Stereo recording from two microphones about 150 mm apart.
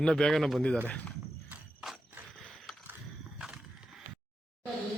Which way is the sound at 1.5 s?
5° right (ahead or behind).